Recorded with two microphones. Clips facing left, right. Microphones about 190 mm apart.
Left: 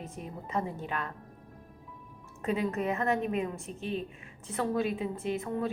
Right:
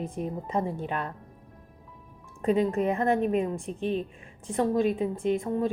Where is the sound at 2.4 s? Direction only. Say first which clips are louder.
Right 6 dB; 35° right (ahead or behind).